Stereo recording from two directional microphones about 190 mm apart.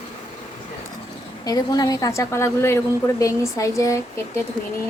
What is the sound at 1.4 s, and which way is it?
A woman's voice, 20° left (ahead or behind).